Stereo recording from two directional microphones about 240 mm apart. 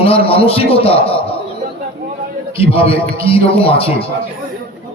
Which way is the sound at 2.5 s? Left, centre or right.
Left.